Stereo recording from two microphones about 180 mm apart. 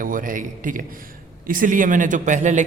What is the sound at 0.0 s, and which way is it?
A man's voice, 50° right (ahead or behind).